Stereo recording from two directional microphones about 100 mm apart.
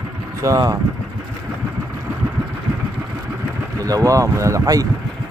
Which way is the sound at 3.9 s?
35° right (ahead or behind).